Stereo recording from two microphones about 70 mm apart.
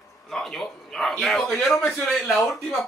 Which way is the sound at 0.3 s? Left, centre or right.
Centre.